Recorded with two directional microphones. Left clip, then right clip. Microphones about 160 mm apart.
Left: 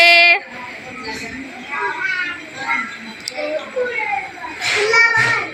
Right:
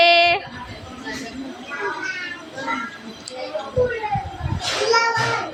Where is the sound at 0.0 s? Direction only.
15° right (ahead or behind).